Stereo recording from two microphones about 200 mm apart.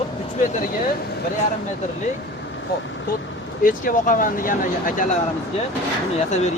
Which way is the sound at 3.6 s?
40° left (ahead or behind).